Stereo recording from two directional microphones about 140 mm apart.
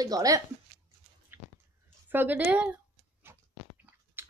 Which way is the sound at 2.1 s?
15° right (ahead or behind).